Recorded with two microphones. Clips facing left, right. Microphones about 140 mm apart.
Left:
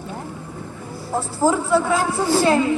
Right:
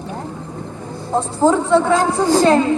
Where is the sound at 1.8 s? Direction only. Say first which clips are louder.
Right 5 dB; 40° right (ahead or behind).